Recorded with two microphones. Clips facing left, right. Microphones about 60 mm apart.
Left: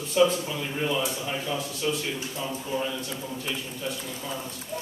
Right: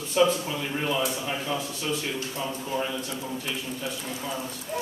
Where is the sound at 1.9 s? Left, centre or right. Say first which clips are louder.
Left 1 dB; centre.